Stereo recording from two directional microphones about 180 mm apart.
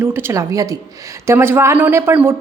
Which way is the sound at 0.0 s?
15° right (ahead or behind).